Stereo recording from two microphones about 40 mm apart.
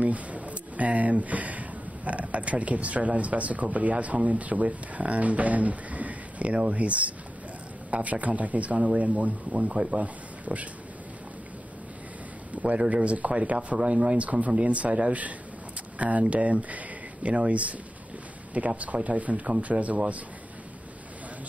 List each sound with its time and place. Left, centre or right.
0.0 s speech: right
12.6 s speech: right